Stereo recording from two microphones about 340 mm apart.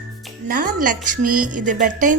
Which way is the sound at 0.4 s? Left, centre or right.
Right.